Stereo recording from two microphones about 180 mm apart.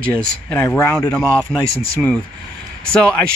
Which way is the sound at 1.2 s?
15° right (ahead or behind).